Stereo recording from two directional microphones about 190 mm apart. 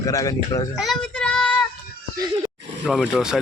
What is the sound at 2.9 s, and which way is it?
Speech, 5° right (ahead or behind).